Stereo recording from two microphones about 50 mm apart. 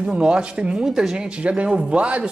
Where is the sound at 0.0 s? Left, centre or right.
Right.